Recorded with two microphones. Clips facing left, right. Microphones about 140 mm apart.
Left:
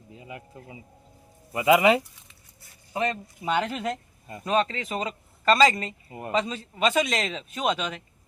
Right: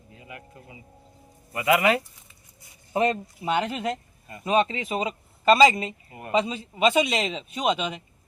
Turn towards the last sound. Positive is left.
turn(degrees=-5)  # may be behind; listen again after turning